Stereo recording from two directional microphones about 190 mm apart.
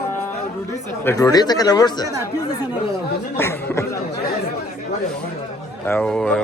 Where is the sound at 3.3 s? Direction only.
10° left (ahead or behind).